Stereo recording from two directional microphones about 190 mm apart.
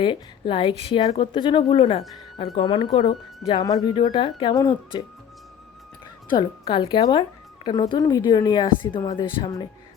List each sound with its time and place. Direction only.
0.0 s a woman's voice: 25° left (ahead or behind)
6.3 s a woman's voice: 25° left (ahead or behind)